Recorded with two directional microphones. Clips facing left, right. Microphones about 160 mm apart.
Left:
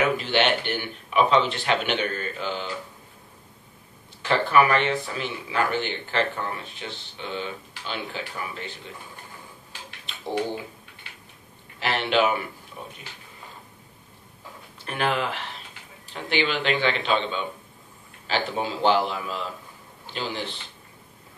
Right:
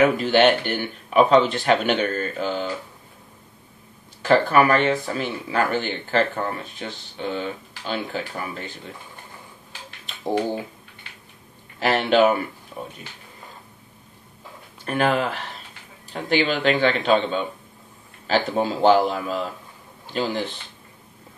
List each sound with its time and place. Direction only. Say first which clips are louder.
0.2 s speech: right 6 dB; 45° right (ahead or behind)
4.2 s speech: right 3 dB; 45° right (ahead or behind)
11.8 s speech: right 5 dB; 45° right (ahead or behind)
14.9 s speech: right 5 dB; 45° right (ahead or behind)